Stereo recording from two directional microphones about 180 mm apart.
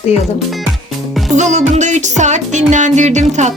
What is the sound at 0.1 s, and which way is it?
Speech, 40° left (ahead or behind).